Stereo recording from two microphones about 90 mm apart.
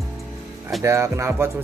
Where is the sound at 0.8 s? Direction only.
35° right (ahead or behind).